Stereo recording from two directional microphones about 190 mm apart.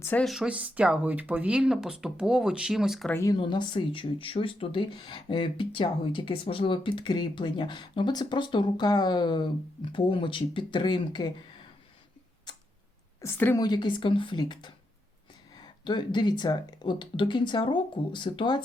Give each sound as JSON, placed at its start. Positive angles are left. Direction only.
{"t": 0.0, "sound": "speech", "side_deg": 5}
{"t": 3.1, "sound": "speech", "side_deg": 15}
{"t": 3.3, "sound": "speech", "side_deg": 25}
{"t": 13.2, "sound": "speech", "side_deg": 10}